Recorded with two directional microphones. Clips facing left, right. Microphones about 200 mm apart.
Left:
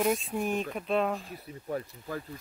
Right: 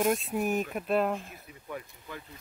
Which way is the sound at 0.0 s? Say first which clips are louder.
Right 1 dB; centre (ahead or behind).